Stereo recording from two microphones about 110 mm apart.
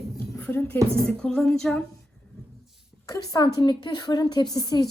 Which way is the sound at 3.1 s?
35° left (ahead or behind).